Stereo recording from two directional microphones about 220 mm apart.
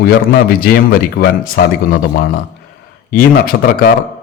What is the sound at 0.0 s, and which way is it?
Speech, 45° left (ahead or behind).